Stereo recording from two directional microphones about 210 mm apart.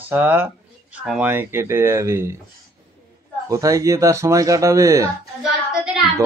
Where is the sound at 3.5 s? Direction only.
15° right (ahead or behind).